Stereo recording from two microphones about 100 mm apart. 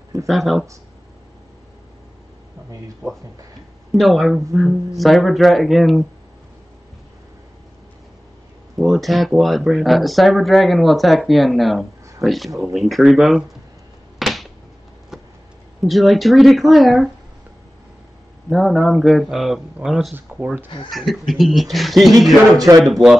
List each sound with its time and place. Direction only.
0.3 s speech: centre (ahead or behind)
3.0 s speech: 20° right (ahead or behind)
3.9 s speech: centre (ahead or behind)
8.7 s speech: centre (ahead or behind)
14.1 s a sound: centre (ahead or behind)
15.8 s speech: centre (ahead or behind)
18.5 s speech: centre (ahead or behind)
22.6 s speech: 40° right (ahead or behind)
22.8 s speech: centre (ahead or behind)